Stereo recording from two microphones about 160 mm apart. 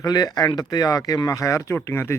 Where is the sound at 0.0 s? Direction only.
25° left (ahead or behind).